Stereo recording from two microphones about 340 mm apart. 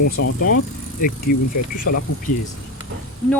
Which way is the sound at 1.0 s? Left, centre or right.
Left.